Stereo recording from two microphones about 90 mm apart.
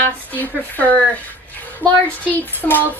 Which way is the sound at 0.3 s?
20° left (ahead or behind).